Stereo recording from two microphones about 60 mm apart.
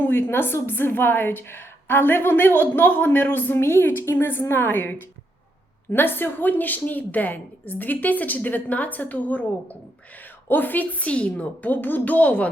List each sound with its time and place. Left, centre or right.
0.0 s a woman's voice: left